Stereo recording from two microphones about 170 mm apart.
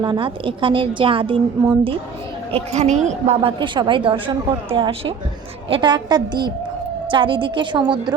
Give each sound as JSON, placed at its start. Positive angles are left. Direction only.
{"t": 0.0, "sound": "a woman's voice", "side_deg": -30}
{"t": 2.7, "sound": "a woman's voice", "side_deg": -45}